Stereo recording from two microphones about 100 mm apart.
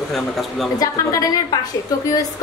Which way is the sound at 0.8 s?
35° left (ahead or behind).